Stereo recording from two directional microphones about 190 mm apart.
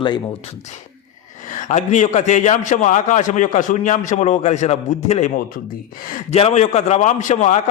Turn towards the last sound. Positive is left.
turn(degrees=35)  # may be behind; listen again after turning